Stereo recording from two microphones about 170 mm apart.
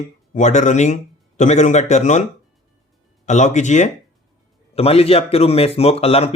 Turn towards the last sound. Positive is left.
turn(degrees=35)  # may be behind; listen again after turning